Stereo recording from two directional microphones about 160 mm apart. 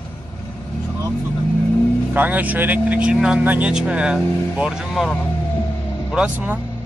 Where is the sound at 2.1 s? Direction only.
10° right (ahead or behind).